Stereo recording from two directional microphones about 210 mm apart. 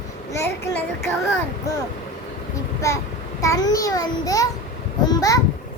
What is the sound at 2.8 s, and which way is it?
A child's voice, 15° left (ahead or behind).